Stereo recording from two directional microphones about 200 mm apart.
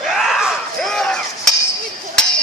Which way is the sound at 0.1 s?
Centre (ahead or behind).